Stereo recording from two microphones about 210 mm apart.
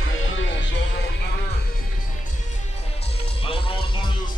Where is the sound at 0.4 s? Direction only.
60° left (ahead or behind).